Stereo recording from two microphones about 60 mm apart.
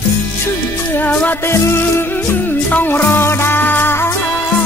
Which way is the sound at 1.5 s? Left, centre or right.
Left.